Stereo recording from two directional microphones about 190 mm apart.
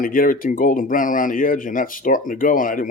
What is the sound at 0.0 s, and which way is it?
Speech, 45° left (ahead or behind).